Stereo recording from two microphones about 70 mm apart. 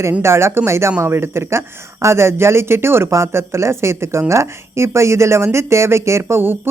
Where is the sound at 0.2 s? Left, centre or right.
Right.